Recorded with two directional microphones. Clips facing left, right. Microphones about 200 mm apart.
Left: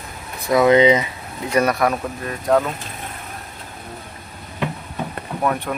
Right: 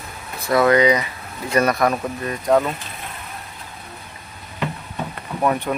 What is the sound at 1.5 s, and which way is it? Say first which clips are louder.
Speech: even; 5° left (ahead or behind).